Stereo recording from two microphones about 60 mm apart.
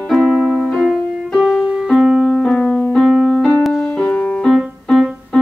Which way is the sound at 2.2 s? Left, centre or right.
Centre.